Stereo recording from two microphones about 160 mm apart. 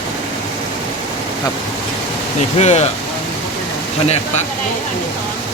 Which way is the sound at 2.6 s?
45° left (ahead or behind).